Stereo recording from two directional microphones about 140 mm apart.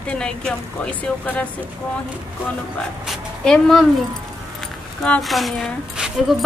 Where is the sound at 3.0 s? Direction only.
5° left (ahead or behind).